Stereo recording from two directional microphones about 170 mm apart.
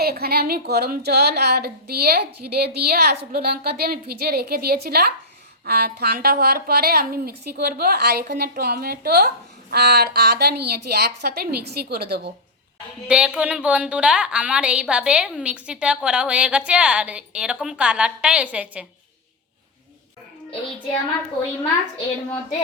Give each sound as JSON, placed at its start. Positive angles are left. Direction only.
{"t": 0.0, "sound": "a woman's voice", "side_deg": -65}
{"t": 13.1, "sound": "a woman's voice", "side_deg": -5}